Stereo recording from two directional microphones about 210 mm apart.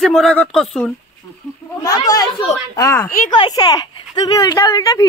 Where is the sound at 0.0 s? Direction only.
Centre (ahead or behind).